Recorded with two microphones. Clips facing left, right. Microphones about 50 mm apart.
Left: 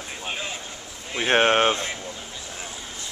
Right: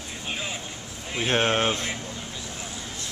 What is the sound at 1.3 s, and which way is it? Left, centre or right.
Speech, left.